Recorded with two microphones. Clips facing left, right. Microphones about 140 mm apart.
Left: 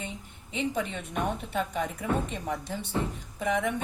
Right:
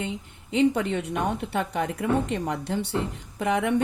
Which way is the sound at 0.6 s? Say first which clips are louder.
Right 8 dB; 75° right (ahead or behind).